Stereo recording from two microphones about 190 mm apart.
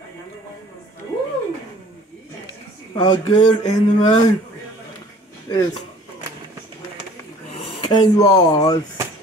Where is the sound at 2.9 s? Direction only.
20° left (ahead or behind).